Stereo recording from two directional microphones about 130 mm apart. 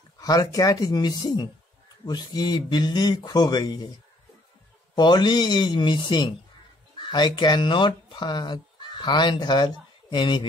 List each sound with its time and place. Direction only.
0.2 s speech: 30° left (ahead or behind)
4.9 s speech: 35° left (ahead or behind)